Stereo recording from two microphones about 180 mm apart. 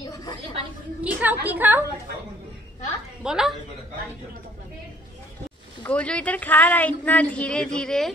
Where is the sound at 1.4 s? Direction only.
10° right (ahead or behind).